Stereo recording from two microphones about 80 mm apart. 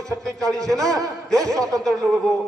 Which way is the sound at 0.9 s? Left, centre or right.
Right.